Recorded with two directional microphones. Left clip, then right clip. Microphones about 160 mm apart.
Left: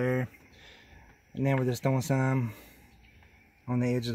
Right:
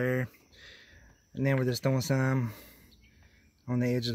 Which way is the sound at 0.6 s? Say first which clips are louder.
Right 4 dB; 5° left (ahead or behind).